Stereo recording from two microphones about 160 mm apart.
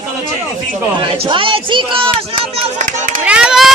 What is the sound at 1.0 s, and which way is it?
Speech, 30° right (ahead or behind).